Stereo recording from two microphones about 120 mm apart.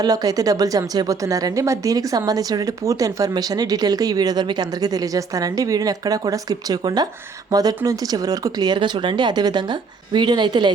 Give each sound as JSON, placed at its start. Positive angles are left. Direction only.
{"t": 0.0, "sound": "a woman's voice", "side_deg": -30}